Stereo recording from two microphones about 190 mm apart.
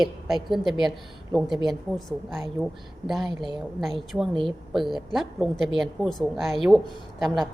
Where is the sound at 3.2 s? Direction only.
25° left (ahead or behind).